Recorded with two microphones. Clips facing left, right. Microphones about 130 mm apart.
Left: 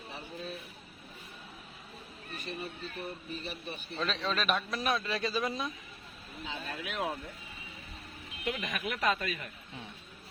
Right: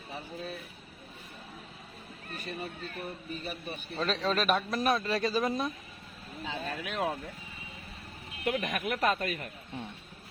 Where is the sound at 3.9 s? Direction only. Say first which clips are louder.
Right 4 dB; 40° right (ahead or behind).